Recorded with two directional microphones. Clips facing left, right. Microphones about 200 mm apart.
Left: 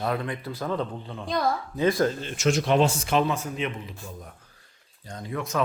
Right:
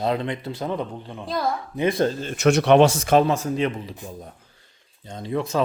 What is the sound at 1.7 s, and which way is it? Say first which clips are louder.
Speech: right 2 dB; 25° right (ahead or behind).